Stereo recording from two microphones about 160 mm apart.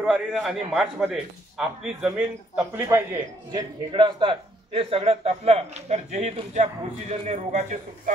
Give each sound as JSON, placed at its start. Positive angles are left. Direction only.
{"t": 0.0, "sound": "a man's voice", "side_deg": 0}
{"t": 3.9, "sound": "a man's voice", "side_deg": -30}